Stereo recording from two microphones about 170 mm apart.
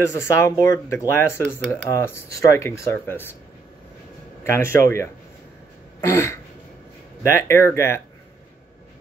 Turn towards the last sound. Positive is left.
turn(degrees=15)  # may be behind; listen again after turning